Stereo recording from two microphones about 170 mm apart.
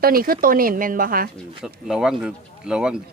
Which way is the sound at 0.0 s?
60° right (ahead or behind).